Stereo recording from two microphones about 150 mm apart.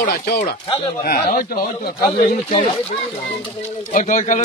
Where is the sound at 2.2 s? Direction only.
60° left (ahead or behind).